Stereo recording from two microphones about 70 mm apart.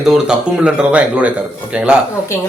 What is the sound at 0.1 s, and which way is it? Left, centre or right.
Speech, centre.